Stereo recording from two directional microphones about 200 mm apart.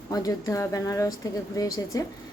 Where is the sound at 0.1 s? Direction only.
20° left (ahead or behind).